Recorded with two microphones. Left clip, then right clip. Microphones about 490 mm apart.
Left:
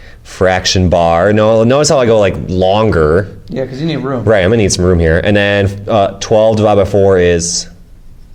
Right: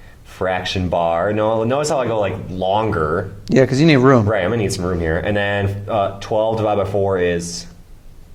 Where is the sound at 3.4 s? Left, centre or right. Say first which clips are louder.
Right 5 dB; right.